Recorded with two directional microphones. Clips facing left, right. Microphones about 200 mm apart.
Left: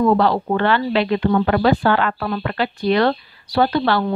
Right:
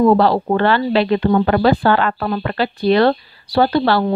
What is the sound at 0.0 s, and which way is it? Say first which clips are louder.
Speech: right 3 dB; 35° right (ahead or behind).